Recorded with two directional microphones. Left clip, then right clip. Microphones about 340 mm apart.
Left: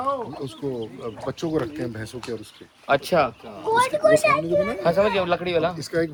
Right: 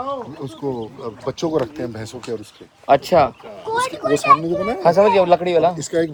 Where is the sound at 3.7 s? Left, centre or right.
Left.